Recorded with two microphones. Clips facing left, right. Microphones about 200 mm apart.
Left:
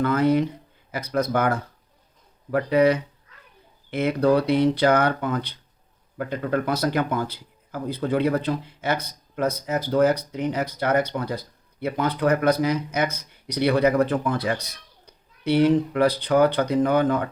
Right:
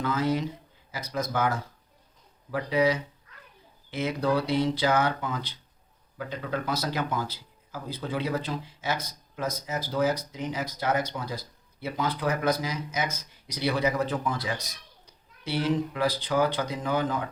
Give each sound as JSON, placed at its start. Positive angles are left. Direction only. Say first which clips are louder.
{"t": 0.0, "sound": "a man's voice", "louder": "left 7 dB", "side_deg": 60}